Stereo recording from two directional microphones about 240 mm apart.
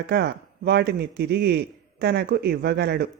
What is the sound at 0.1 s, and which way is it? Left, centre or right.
A man's voice, right.